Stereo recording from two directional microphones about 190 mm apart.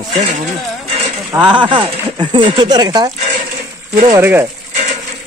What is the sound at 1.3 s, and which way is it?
Speech, 25° right (ahead or behind).